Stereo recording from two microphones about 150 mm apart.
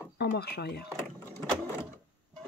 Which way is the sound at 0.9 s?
15° left (ahead or behind).